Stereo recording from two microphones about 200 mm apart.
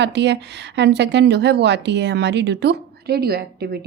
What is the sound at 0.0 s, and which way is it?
A woman's voice, 60° right (ahead or behind).